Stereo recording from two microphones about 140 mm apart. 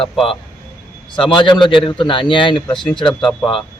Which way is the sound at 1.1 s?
35° left (ahead or behind).